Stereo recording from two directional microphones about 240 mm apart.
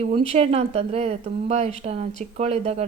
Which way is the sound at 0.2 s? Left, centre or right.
Right.